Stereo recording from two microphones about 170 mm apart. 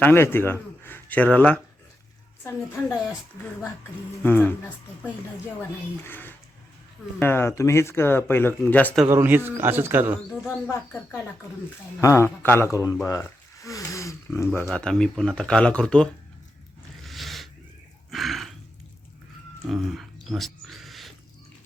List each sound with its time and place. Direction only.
0.0 s speech: 15° left (ahead or behind)
4.2 s speech: 10° left (ahead or behind)
6.1 s speech: 10° left (ahead or behind)
9.0 s speech: 15° right (ahead or behind)
10.4 s speech: 15° left (ahead or behind)
14.7 s speech: 5° left (ahead or behind)
17.1 s cat: centre (ahead or behind)
18.1 s a sound: centre (ahead or behind)
19.6 s speech: centre (ahead or behind)
20.2 s a sound: centre (ahead or behind)